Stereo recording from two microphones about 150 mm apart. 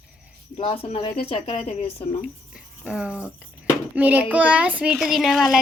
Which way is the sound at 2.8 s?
5° right (ahead or behind).